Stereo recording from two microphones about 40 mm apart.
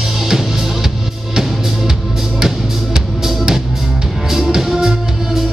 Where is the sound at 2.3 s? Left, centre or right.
Centre.